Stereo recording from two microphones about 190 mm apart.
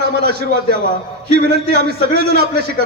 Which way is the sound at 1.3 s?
55° right (ahead or behind).